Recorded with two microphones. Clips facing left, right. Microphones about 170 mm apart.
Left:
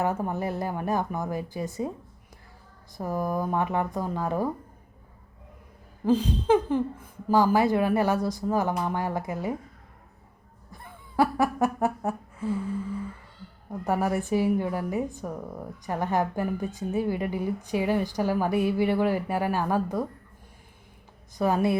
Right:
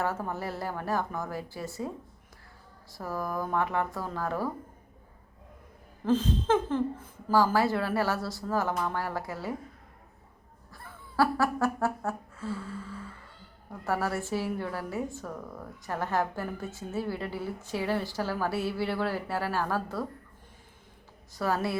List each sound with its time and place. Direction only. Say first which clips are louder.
0.0 s a woman's voice: left 4 dB; 15° left (ahead or behind)
3.0 s a woman's voice: left 5 dB; 20° left (ahead or behind)
6.1 s a woman's voice: left 4 dB; 10° left (ahead or behind)
10.7 s music: left 2 dB; 20° left (ahead or behind)
13.8 s a woman's voice: left 4 dB; 15° left (ahead or behind)
21.3 s a woman's voice: left 6 dB; 20° left (ahead or behind)